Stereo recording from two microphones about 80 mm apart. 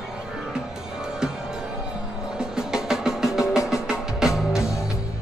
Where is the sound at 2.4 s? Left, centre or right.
Centre.